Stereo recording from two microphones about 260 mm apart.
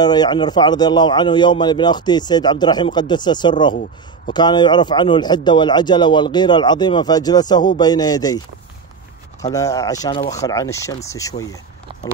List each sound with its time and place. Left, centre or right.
0.0 s a man's voice: centre
9.4 s a man's voice: centre
10.4 s a man's voice: centre